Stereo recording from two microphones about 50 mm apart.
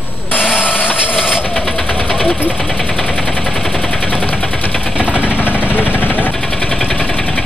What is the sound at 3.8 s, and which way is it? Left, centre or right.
Machine gun, left.